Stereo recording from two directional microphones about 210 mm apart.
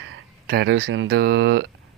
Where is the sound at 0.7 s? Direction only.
65° right (ahead or behind).